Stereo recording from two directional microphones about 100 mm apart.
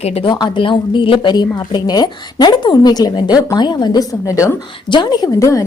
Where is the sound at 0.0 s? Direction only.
90° left.